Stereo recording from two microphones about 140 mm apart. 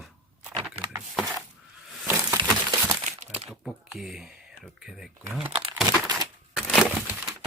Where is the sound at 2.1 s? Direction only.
20° right (ahead or behind).